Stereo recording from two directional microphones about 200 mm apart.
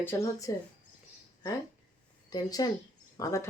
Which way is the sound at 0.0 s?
10° left (ahead or behind).